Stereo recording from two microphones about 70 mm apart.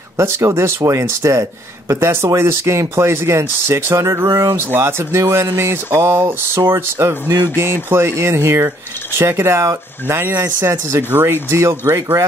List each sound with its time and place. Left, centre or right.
0.2 s speech: right
4.7 s speech: right